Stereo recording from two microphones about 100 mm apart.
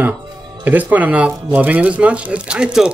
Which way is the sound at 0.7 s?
15° right (ahead or behind).